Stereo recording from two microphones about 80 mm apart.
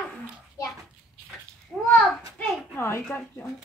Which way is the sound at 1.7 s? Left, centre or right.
Centre.